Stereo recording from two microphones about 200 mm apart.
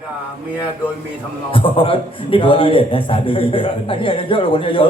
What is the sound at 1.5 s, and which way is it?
A man's voice, 25° left (ahead or behind).